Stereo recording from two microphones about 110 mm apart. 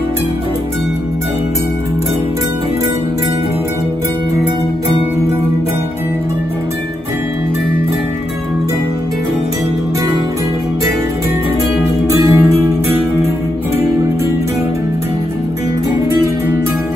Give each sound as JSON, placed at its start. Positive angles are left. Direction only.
{"t": 12.1, "sound": "music", "side_deg": -25}